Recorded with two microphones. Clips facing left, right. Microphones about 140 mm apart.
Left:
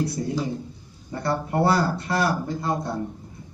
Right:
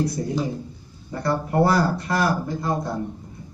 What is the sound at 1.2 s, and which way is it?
Speech, 30° left (ahead or behind).